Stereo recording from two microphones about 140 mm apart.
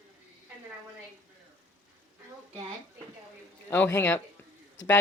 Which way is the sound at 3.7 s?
15° left (ahead or behind).